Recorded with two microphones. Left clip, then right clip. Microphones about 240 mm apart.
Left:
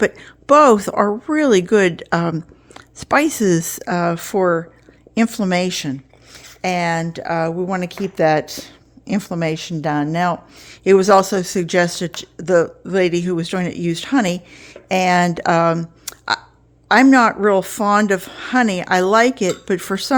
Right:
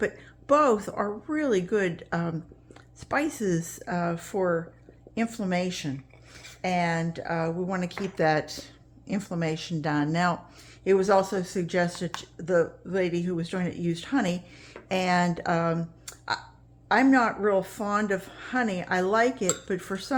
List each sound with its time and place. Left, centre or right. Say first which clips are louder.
0.0 s speech: left 11 dB; left
10.8 s speech: left 10 dB; left